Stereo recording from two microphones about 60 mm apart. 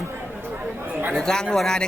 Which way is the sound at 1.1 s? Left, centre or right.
Centre.